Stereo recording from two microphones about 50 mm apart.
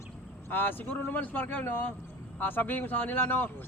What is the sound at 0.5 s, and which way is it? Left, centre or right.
Speech, left.